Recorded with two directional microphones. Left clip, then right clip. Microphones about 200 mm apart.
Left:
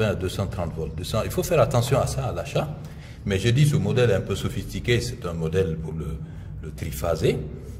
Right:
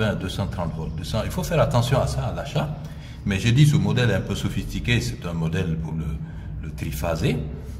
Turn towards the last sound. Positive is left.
turn(degrees=10)  # may be behind; listen again after turning